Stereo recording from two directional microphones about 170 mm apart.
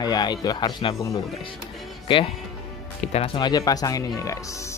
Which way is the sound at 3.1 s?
30° left (ahead or behind).